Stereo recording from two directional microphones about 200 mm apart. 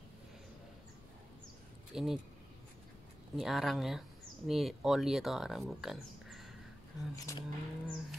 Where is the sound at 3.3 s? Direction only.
Centre (ahead or behind).